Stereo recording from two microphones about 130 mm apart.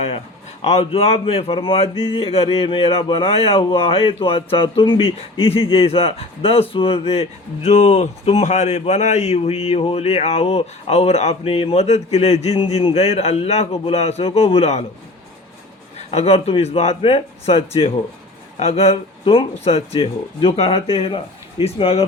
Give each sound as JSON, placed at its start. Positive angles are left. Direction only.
{"t": 0.6, "sound": "speech", "side_deg": 50}
{"t": 16.0, "sound": "speech", "side_deg": 55}